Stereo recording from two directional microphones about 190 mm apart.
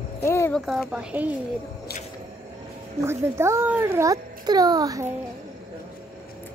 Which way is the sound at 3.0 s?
15° right (ahead or behind).